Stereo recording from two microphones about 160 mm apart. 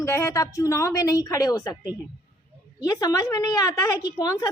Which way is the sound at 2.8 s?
25° left (ahead or behind).